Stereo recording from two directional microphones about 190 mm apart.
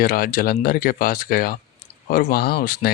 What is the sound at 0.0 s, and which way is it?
Speech, 50° left (ahead or behind).